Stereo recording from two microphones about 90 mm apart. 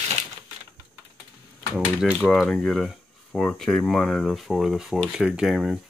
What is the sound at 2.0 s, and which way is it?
Speech, 15° right (ahead or behind).